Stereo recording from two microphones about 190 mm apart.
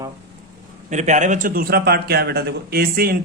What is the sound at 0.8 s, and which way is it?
A man's voice, 40° right (ahead or behind).